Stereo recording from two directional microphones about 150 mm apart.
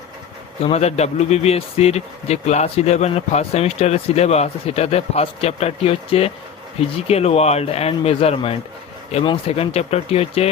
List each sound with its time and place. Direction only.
0.6 s speech: 45° left (ahead or behind)